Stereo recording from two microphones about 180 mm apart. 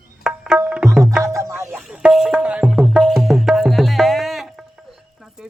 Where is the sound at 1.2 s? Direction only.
15° right (ahead or behind).